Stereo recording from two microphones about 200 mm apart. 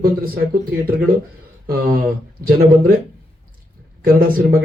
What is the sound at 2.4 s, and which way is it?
Speech, 50° right (ahead or behind).